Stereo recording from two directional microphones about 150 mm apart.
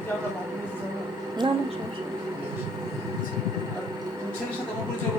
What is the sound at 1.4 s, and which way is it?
Speech, 30° right (ahead or behind).